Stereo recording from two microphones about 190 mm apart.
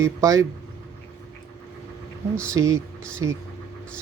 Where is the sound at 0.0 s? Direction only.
15° right (ahead or behind).